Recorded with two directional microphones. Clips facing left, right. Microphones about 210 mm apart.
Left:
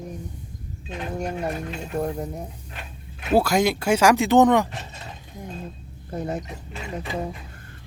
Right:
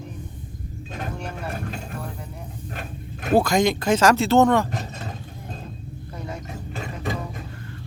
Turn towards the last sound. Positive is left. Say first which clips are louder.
# even
turn(degrees=-45)  # may be behind; listen again after turning